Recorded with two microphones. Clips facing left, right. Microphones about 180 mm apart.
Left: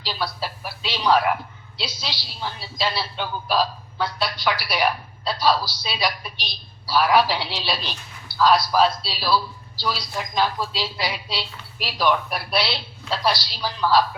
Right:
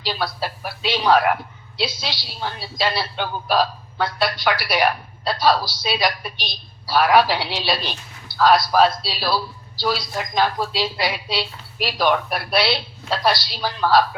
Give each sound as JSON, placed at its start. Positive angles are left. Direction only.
{"t": 0.0, "sound": "a woman's voice", "side_deg": -60}